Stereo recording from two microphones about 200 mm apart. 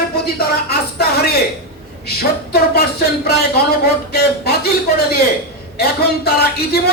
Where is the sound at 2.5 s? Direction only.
55° left (ahead or behind).